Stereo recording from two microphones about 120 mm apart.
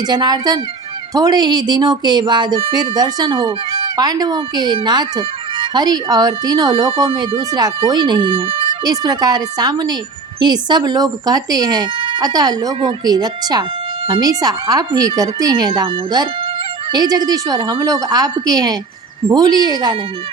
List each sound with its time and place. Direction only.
0.0 s speech: 35° right (ahead or behind)